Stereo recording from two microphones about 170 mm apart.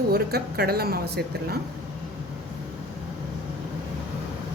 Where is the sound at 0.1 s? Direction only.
70° right (ahead or behind).